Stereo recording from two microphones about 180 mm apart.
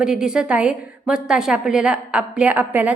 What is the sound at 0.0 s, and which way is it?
A woman's voice, 5° right (ahead or behind).